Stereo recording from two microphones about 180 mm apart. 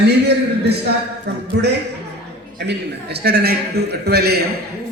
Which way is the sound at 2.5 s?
65° right (ahead or behind).